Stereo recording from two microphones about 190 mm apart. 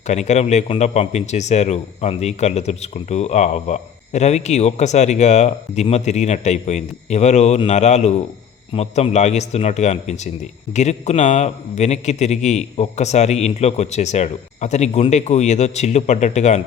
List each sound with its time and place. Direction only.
0.1 s a man's voice: 35° left (ahead or behind)